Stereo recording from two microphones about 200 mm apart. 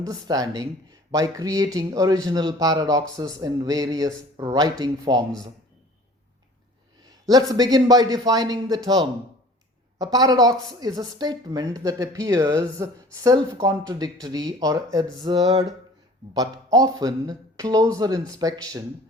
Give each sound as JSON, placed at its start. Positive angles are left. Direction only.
{"t": 0.0, "sound": "a woman's voice", "side_deg": -20}
{"t": 7.0, "sound": "a woman's voice", "side_deg": -20}